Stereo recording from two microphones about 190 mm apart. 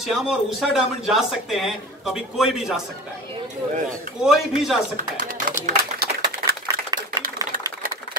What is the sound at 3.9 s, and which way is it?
Speech, centre (ahead or behind).